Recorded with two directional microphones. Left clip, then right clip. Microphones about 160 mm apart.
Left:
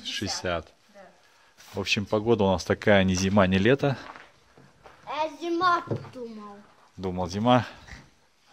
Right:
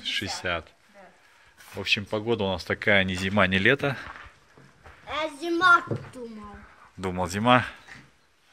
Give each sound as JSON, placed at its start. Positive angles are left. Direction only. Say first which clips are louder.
{"t": 0.0, "sound": "a sound", "louder": "right 3 dB", "side_deg": 50}
{"t": 0.4, "sound": "speech", "louder": "even", "side_deg": 45}
{"t": 1.8, "sound": "speech", "louder": "even", "side_deg": 55}
{"t": 5.0, "sound": "a sound", "louder": "even", "side_deg": -50}
{"t": 7.0, "sound": "speech", "louder": "right 2 dB", "side_deg": 15}
{"t": 7.5, "sound": "speech", "louder": "right 3 dB", "side_deg": 35}